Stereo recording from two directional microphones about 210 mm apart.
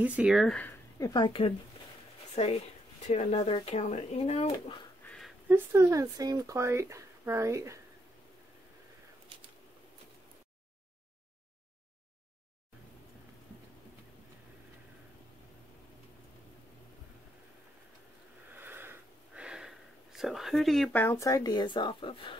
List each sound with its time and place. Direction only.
0.0 s speech: 5° right (ahead or behind); by 4.8 s 25° left (ahead or behind)
5.0 s a sound: 5° left (ahead or behind)
5.5 s speech: 10° right (ahead or behind)
18.5 s sniff: 10° right (ahead or behind); by 22.4 s 25° left (ahead or behind)